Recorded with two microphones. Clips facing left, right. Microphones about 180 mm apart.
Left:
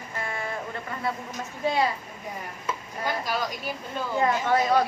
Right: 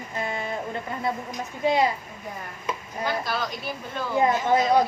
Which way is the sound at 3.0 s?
10° left (ahead or behind).